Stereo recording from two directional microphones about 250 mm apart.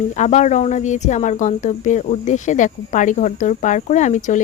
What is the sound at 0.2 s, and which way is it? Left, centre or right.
Speech, left.